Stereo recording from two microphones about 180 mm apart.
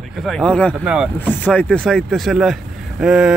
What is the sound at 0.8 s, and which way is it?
Speech, 5° right (ahead or behind).